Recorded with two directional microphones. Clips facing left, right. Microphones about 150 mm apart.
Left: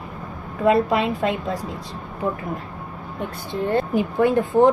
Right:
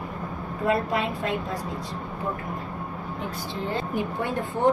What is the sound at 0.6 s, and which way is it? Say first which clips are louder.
Speech: left 7 dB; 90° left.